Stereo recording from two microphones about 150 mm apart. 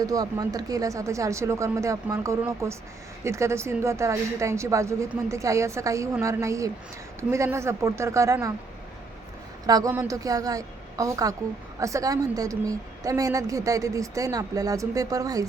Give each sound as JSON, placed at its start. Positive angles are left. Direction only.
{"t": 0.0, "sound": "a woman's voice", "side_deg": -25}
{"t": 9.6, "sound": "a woman's voice", "side_deg": -25}